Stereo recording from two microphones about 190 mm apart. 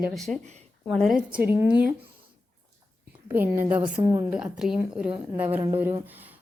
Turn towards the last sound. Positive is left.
turn(degrees=-10)  # may be behind; listen again after turning